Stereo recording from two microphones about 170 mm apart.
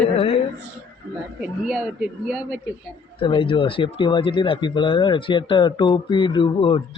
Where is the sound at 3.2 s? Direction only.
30° left (ahead or behind).